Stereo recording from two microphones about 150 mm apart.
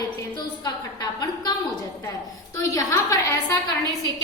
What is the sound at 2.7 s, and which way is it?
Speech, 20° left (ahead or behind).